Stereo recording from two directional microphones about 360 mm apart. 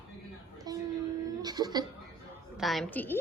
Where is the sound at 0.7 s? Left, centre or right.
Centre.